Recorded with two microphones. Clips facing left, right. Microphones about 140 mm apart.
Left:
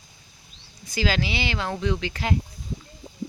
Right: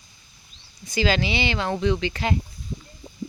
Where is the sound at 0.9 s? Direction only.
5° left (ahead or behind).